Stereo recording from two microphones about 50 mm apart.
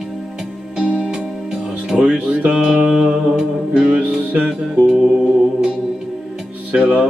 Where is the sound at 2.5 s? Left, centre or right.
Centre.